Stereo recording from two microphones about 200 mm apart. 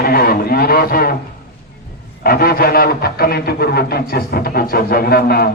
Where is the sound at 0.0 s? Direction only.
50° left (ahead or behind).